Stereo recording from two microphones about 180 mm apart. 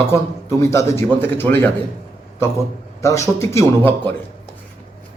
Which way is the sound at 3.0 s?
15° left (ahead or behind).